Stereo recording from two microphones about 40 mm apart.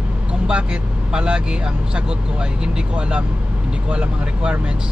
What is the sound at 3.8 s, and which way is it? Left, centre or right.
Speech, right.